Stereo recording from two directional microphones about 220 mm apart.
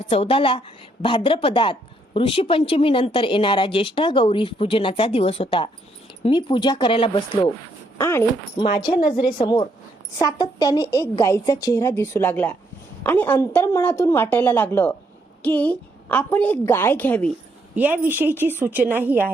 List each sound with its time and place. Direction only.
0.0 s a woman's voice: 25° left (ahead or behind); by 17.3 s 5° left (ahead or behind)
17.7 s a woman's voice: 5° right (ahead or behind)